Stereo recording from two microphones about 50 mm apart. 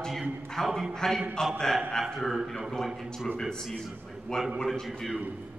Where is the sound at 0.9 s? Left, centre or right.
Centre.